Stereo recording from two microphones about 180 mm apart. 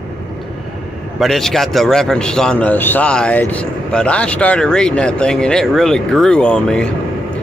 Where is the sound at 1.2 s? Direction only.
Centre (ahead or behind).